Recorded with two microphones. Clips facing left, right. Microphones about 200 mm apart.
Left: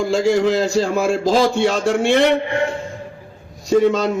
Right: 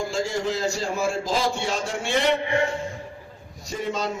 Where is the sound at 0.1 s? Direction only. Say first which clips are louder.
Left 10 dB; 85° left.